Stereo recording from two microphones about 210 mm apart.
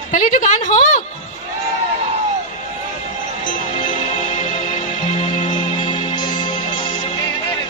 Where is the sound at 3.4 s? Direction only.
40° left (ahead or behind).